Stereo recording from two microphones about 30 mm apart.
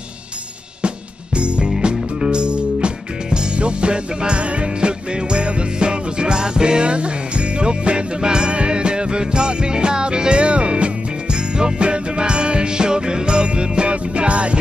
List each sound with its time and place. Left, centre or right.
0.8 s music: right